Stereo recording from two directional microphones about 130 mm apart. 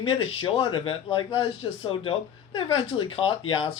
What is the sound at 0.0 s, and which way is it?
Speech, 45° left (ahead or behind).